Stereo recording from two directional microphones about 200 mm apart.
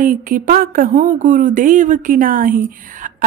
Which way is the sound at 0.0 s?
45° right (ahead or behind).